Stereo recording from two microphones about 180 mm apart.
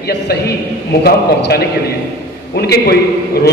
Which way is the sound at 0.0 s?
65° left (ahead or behind).